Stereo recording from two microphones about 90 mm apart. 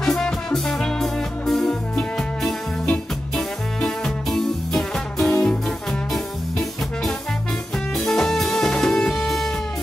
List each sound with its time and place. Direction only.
0.0 s music: 5° left (ahead or behind)
7.9 s music: 5° left (ahead or behind)